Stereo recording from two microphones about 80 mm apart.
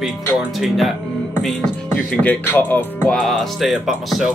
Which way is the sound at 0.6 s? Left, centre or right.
Centre.